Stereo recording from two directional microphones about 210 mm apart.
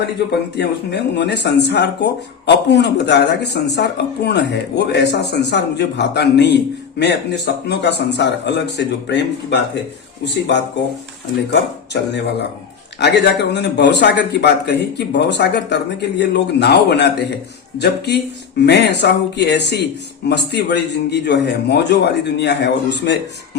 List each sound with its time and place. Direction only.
0.0 s a man's voice: 50° left (ahead or behind)
11.9 s a man's voice: 55° left (ahead or behind)